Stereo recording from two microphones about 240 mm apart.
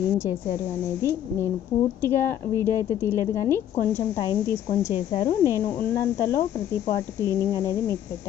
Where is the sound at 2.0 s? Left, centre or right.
Centre.